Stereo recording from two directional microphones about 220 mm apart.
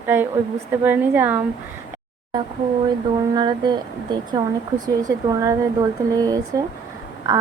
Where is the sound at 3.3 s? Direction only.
20° right (ahead or behind).